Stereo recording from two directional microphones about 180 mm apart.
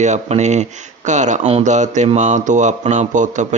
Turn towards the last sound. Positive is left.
turn(degrees=-40)  # may be behind; listen again after turning